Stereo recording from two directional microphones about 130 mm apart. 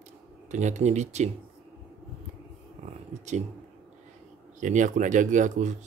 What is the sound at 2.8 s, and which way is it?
Purr, 60° right (ahead or behind).